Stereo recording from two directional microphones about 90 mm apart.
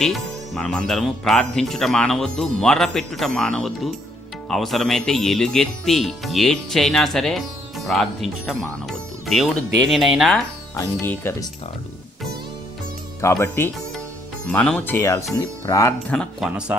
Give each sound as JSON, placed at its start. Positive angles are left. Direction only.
{"t": 0.0, "sound": "speech", "side_deg": 5}
{"t": 11.0, "sound": "speech", "side_deg": 25}
{"t": 13.2, "sound": "speech", "side_deg": 30}
{"t": 14.5, "sound": "speech", "side_deg": 10}
{"t": 14.8, "sound": "speech", "side_deg": 30}
{"t": 16.4, "sound": "speech", "side_deg": -10}